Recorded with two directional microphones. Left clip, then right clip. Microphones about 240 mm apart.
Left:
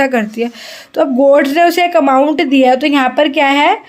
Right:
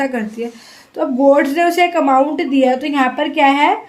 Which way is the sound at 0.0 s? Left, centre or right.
Left.